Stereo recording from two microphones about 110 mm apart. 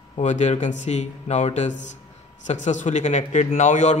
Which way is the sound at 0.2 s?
90° left.